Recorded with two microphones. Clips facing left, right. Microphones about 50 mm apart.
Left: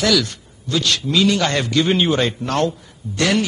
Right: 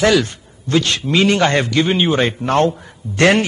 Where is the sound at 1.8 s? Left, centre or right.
Centre.